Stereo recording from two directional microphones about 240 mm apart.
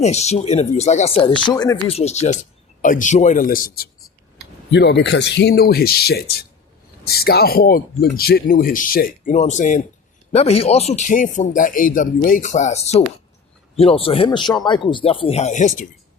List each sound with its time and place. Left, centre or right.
0.0 s speech: left